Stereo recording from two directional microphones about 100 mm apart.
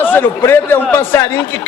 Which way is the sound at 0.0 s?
20° left (ahead or behind).